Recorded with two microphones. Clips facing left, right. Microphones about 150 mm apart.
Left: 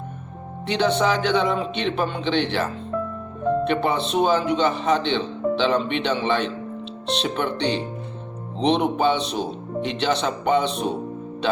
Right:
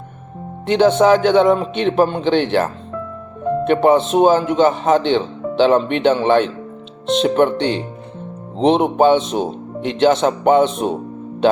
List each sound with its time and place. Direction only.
0.7 s speech: 50° right (ahead or behind)